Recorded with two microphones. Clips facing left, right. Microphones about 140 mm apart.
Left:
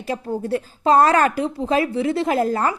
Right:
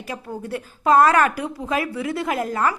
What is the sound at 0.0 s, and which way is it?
A woman's voice, 30° left (ahead or behind).